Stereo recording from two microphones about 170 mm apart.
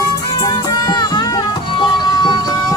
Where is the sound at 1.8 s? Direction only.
25° left (ahead or behind).